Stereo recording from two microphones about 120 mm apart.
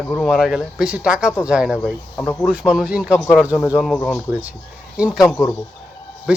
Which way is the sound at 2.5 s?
10° right (ahead or behind).